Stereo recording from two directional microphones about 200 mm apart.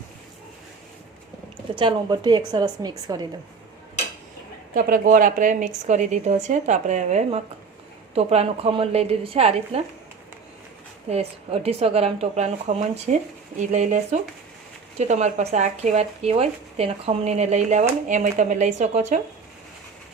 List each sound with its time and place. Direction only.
1.8 s a woman's voice: 20° right (ahead or behind)
4.7 s speech: 45° right (ahead or behind)
11.1 s speech: 30° right (ahead or behind)